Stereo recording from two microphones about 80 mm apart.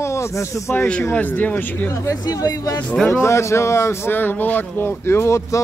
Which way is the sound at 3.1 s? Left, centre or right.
Left.